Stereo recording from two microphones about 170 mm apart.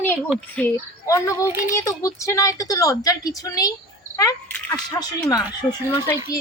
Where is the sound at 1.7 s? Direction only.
20° left (ahead or behind).